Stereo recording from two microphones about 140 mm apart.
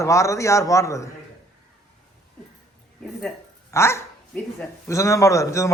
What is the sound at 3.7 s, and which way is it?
A man's voice, 20° left (ahead or behind).